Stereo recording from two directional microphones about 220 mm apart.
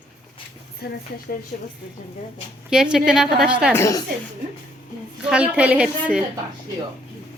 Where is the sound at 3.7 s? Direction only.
15° left (ahead or behind).